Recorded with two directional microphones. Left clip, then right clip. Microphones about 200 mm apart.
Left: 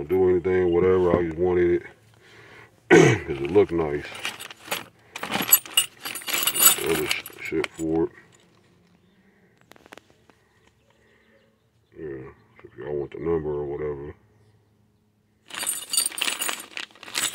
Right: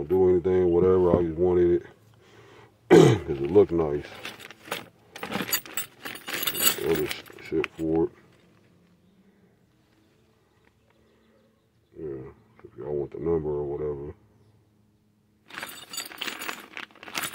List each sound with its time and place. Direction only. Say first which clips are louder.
0.0 s speech: left 1 dB; 5° right (ahead or behind)
4.6 s keys jangling: left 3 dB; 15° right (ahead or behind)
7.3 s speech: left 1 dB; 5° right (ahead or behind)
12.0 s a sound: left 1 dB; centre (ahead or behind)
13.5 s speech: left 1 dB; 5° left (ahead or behind)
15.5 s keys jangling: left 7 dB; 5° right (ahead or behind)